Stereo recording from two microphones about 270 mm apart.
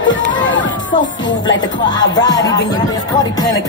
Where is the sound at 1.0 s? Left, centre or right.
Left.